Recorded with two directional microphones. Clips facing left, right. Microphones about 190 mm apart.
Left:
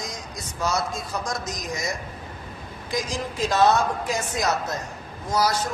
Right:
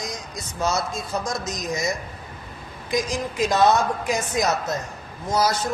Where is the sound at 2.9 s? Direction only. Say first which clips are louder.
Right 3 dB; 15° right (ahead or behind).